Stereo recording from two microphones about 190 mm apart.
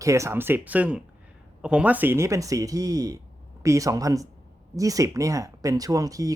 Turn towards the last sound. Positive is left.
turn(degrees=-20)  # may be behind; listen again after turning